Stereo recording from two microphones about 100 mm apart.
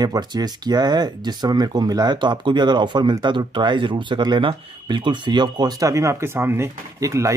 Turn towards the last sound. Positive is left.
turn(degrees=-30)  # may be behind; listen again after turning